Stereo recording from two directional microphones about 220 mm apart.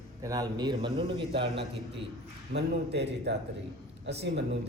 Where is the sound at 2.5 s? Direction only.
50° right (ahead or behind).